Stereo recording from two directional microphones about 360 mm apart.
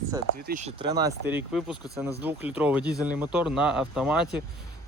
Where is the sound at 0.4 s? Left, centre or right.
Centre.